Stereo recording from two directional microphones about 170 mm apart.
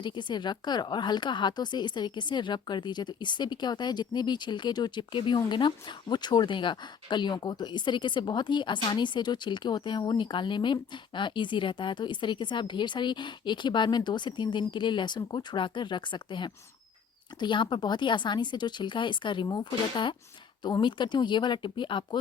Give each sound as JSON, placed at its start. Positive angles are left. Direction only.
{"t": 0.0, "sound": "speech", "side_deg": 25}